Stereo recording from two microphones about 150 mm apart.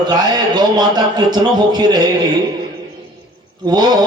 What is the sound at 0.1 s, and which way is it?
A man's voice, 25° right (ahead or behind).